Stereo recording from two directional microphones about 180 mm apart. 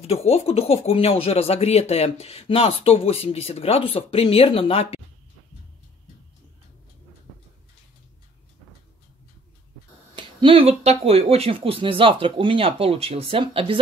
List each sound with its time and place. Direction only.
0.0 s speech: 35° left (ahead or behind)
10.1 s speech: 30° right (ahead or behind)